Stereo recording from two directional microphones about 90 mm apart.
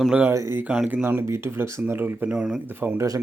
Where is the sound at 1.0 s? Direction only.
30° right (ahead or behind).